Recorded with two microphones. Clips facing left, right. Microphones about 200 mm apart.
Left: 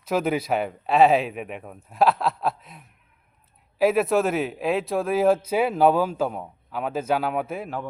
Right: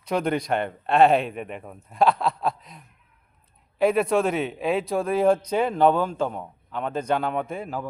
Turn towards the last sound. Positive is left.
turn(degrees=0)  # may be behind; listen again after turning